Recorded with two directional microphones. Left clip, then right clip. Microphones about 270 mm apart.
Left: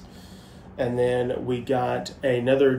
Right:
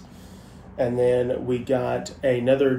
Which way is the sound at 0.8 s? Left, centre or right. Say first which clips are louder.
Right 2 dB; centre.